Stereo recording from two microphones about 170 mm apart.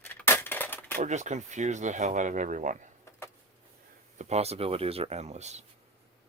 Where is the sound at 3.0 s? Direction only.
15° left (ahead or behind).